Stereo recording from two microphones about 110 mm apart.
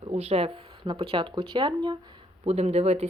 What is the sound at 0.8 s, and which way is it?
A woman's voice, 55° right (ahead or behind).